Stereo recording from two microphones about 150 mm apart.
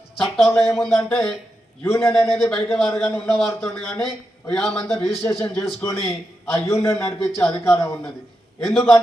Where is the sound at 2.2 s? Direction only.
Centre (ahead or behind).